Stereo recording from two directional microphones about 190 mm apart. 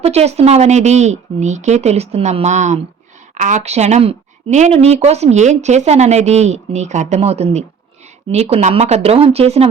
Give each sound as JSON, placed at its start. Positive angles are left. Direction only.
{"t": 0.0, "sound": "a woman's voice", "side_deg": -35}